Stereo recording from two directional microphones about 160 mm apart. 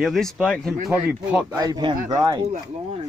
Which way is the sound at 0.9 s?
10° right (ahead or behind).